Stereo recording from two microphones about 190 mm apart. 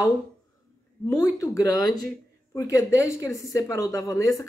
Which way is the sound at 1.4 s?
15° left (ahead or behind).